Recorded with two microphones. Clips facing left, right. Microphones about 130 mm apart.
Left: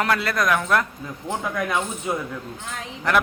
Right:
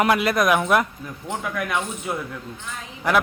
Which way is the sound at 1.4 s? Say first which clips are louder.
Left 1 dB; 25° left (ahead or behind).